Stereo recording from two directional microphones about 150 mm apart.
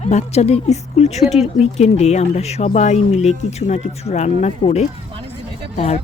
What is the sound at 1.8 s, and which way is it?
Speech, 50° left (ahead or behind).